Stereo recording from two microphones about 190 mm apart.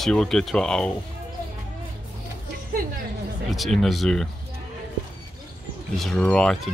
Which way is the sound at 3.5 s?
Centre (ahead or behind).